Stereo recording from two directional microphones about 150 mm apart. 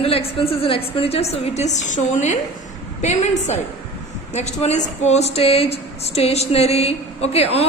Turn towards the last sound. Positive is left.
turn(degrees=45)  # may be behind; listen again after turning